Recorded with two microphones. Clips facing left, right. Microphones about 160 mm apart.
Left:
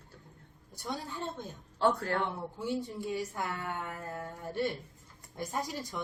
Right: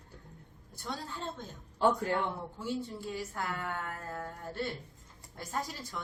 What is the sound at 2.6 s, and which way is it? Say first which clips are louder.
Speech: left 2 dB; 15° left (ahead or behind).